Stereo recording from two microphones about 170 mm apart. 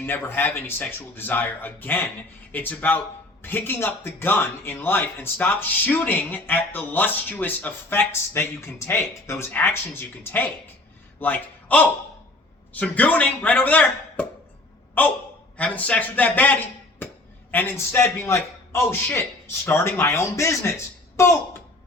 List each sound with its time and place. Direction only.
0.0 s speech: 10° left (ahead or behind)